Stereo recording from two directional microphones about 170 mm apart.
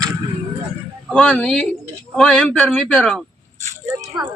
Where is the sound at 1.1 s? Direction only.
5° left (ahead or behind).